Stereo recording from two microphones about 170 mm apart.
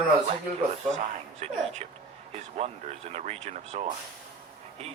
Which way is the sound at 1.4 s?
40° right (ahead or behind).